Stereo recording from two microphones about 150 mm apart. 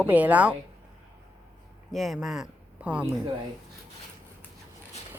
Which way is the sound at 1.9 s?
Centre (ahead or behind).